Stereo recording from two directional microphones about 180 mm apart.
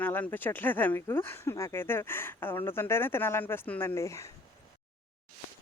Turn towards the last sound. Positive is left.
turn(degrees=15)  # may be behind; listen again after turning